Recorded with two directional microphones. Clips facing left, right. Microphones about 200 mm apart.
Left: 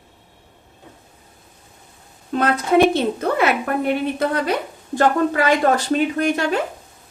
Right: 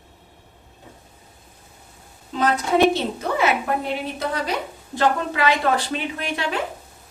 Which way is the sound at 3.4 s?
60° left (ahead or behind).